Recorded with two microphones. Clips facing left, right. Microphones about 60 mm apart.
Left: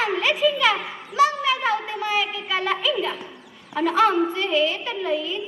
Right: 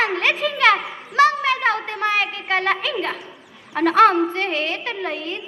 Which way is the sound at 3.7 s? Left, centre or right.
Right.